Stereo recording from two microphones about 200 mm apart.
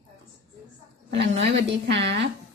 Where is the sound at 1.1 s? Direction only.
65° right (ahead or behind).